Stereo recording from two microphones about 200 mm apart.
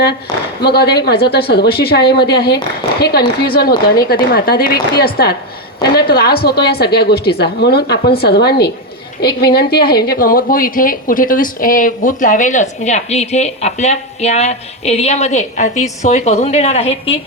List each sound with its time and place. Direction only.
0.6 s a woman's voice: 55° left (ahead or behind); by 17.2 s 30° left (ahead or behind)